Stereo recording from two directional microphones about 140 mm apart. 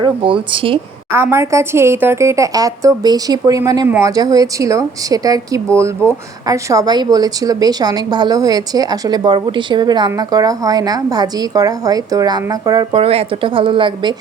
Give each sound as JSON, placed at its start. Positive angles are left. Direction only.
{"t": 0.0, "sound": "speech", "side_deg": -40}
{"t": 1.1, "sound": "a woman's voice", "side_deg": -20}
{"t": 12.9, "sound": "speech", "side_deg": -45}